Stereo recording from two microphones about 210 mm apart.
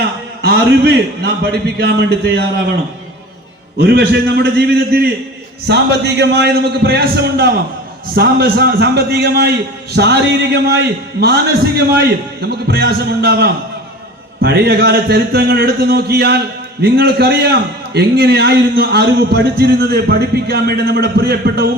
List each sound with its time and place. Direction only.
0.4 s a man's voice: 50° right (ahead or behind)
3.8 s a man's voice: 50° right (ahead or behind)